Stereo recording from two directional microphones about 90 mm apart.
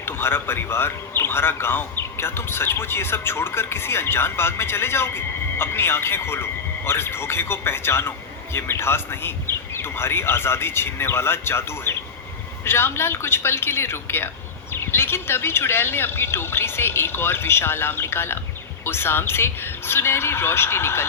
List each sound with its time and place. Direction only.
0.0 s a man's voice: 25° left (ahead or behind)